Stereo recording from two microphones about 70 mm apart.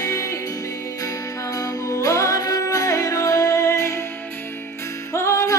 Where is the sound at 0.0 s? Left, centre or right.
Left.